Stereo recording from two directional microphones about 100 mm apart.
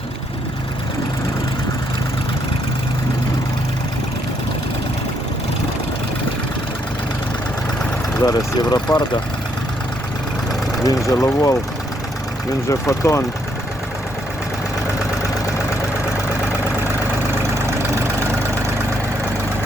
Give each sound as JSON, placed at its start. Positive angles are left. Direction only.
{"t": 8.2, "sound": "speech", "side_deg": 35}
{"t": 10.8, "sound": "speech", "side_deg": 30}
{"t": 12.6, "sound": "speech", "side_deg": 30}